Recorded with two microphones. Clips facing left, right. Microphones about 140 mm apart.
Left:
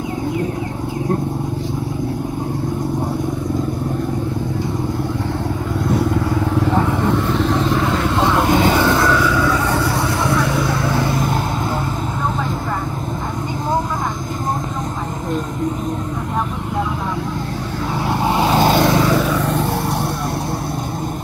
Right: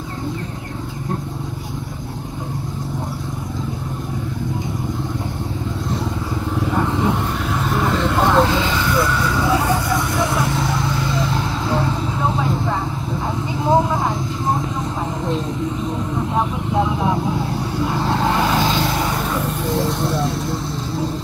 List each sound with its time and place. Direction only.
6.9 s vehicle: 15° right (ahead or behind)
7.3 s vehicle: 5° right (ahead or behind)
8.5 s a sound: 50° left (ahead or behind); by 9.3 s 85° left
10.2 s vehicle: 55° left (ahead or behind)
17.9 s vehicle: 15° left (ahead or behind)
18.8 s vehicle: 85° left; by 20.0 s 60° left (ahead or behind)